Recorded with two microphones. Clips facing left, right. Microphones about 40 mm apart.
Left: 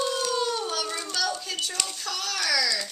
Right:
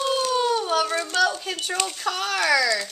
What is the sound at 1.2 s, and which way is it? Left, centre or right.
Speech, right.